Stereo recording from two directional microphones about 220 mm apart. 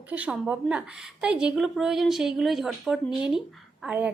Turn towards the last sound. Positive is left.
turn(degrees=-5)  # may be behind; listen again after turning